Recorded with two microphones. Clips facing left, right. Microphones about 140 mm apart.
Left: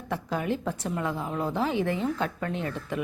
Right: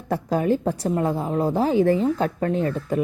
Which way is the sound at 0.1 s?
40° right (ahead or behind).